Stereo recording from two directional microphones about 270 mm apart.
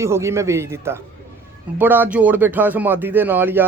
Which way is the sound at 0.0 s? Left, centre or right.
Centre.